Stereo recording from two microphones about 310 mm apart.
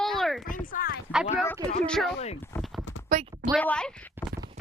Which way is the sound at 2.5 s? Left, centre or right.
Centre.